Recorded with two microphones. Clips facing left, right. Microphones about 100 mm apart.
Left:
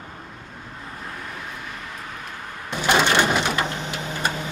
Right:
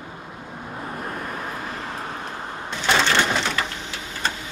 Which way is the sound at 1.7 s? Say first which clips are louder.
Right 5 dB; 35° right (ahead or behind).